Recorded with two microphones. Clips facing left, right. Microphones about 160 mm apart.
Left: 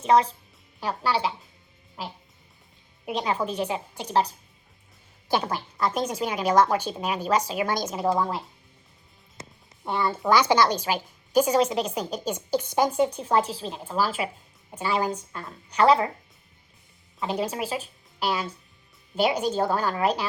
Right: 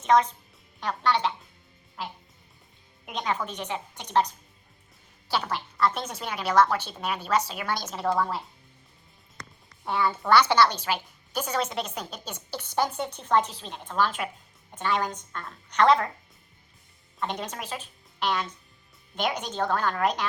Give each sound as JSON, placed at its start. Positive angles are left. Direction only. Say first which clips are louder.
{"t": 0.0, "sound": "a woman's voice", "louder": "left 1 dB", "side_deg": 30}
{"t": 0.8, "sound": "a woman's voice", "louder": "even", "side_deg": 10}
{"t": 3.1, "sound": "a woman's voice", "louder": "left 4 dB", "side_deg": 35}
{"t": 5.7, "sound": "a woman's voice", "louder": "left 1 dB", "side_deg": 10}
{"t": 9.8, "sound": "a child's voice", "louder": "left 2 dB", "side_deg": 10}
{"t": 17.2, "sound": "a woman's voice", "louder": "left 5 dB", "side_deg": 5}